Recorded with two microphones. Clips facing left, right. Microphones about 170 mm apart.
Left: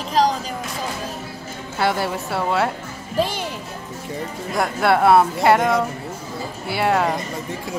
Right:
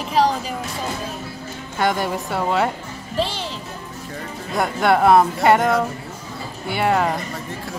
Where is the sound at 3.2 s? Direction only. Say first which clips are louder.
Left 2 dB; 15° left (ahead or behind).